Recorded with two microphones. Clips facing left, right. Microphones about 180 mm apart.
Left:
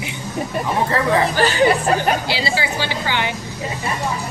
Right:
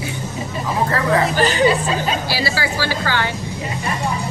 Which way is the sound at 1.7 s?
60° left (ahead or behind).